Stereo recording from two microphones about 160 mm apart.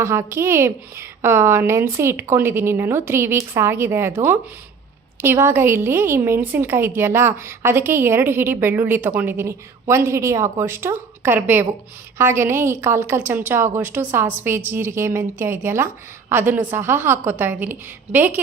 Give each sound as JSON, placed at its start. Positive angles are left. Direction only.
{"t": 0.0, "sound": "a woman's voice", "side_deg": -15}